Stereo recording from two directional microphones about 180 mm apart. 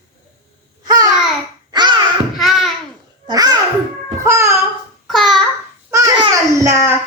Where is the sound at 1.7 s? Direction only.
25° right (ahead or behind).